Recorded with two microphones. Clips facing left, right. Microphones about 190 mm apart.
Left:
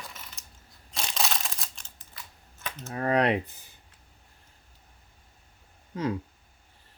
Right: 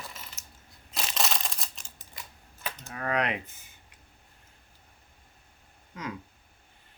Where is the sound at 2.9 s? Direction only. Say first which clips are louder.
Left 6 dB; 35° left (ahead or behind).